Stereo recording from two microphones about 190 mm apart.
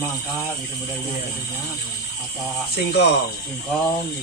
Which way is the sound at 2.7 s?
60° left (ahead or behind).